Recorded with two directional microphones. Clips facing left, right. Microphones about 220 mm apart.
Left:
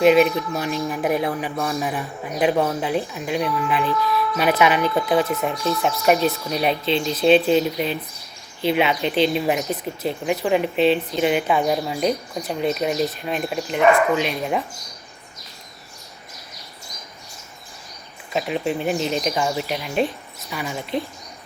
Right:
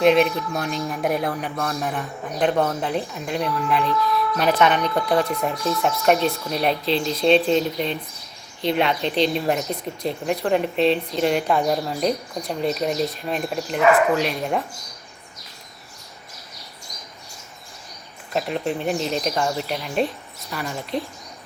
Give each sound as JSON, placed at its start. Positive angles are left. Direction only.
{"t": 0.0, "sound": "speech", "side_deg": 5}
{"t": 18.3, "sound": "speech", "side_deg": 0}